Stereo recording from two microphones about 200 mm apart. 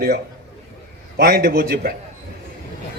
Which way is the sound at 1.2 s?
50° right (ahead or behind).